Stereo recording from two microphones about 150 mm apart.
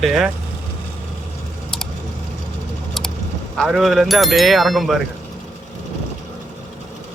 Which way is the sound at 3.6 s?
Centre (ahead or behind).